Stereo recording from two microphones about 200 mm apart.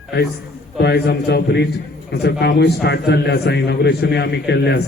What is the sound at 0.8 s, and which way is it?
A man's voice, 55° left (ahead or behind).